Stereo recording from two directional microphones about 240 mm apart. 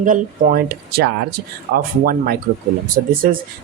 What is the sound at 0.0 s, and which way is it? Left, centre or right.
Speech, right.